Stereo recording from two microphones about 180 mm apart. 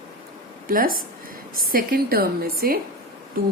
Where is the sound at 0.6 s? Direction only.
50° right (ahead or behind).